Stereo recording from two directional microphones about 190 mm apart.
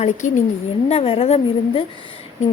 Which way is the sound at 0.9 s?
30° left (ahead or behind).